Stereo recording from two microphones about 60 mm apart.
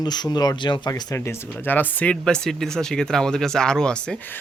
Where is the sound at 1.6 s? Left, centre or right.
Left.